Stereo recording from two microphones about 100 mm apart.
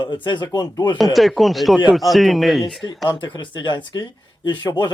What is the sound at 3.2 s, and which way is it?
Speech, 50° left (ahead or behind).